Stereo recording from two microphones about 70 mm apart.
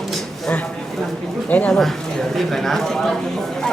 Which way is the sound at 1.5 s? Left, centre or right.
Left.